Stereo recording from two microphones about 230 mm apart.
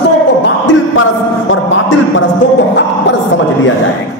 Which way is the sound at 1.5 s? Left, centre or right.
Left.